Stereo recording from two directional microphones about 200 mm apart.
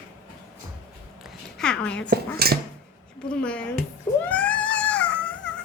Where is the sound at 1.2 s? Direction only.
5° left (ahead or behind).